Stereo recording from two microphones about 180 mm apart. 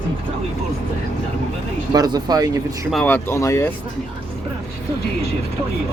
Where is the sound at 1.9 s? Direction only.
20° right (ahead or behind).